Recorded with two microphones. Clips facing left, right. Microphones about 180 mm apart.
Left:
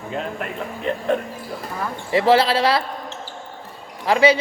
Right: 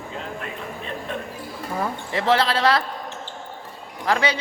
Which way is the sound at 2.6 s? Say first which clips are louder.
Left 1 dB; 25° left (ahead or behind).